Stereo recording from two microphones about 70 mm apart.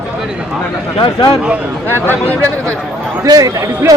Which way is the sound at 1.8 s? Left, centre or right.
Left.